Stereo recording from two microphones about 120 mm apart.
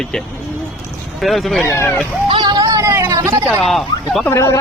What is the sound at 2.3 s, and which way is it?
Music, 35° right (ahead or behind).